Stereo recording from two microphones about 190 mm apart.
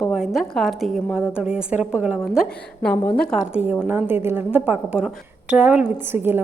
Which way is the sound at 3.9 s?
10° right (ahead or behind).